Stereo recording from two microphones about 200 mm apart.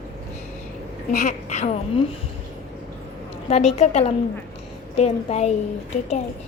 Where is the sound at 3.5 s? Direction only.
35° left (ahead or behind).